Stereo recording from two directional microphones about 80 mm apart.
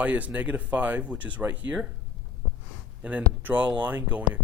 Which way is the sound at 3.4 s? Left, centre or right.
Right.